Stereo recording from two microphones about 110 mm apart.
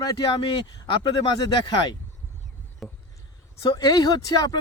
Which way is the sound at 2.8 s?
Centre (ahead or behind).